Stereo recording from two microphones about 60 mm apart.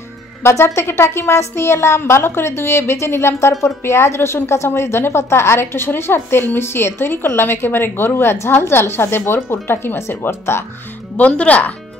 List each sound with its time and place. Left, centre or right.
0.4 s a woman's voice: left
11.1 s speech: left